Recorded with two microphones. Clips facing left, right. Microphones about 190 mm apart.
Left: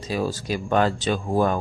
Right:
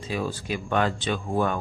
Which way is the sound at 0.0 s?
40° left (ahead or behind).